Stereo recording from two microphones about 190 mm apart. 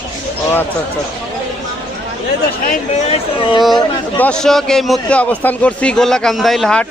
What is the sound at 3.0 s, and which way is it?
Speech, 30° left (ahead or behind).